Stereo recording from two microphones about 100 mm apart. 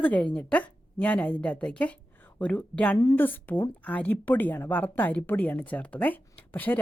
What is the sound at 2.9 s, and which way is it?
Speech, 35° left (ahead or behind).